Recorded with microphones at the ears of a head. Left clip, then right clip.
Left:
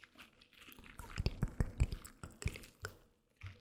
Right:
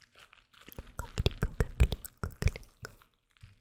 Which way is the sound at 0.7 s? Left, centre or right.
Right.